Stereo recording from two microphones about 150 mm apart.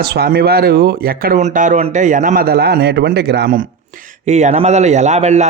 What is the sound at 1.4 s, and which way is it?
A man's voice, 55° right (ahead or behind).